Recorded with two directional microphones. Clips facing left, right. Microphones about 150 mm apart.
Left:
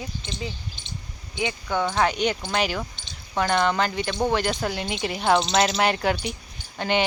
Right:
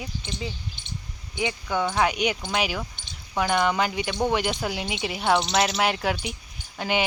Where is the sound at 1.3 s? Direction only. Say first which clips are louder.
Even; 15° right (ahead or behind).